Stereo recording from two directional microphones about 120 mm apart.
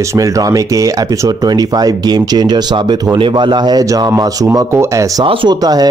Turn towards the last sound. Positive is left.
turn(degrees=-45)  # may be behind; listen again after turning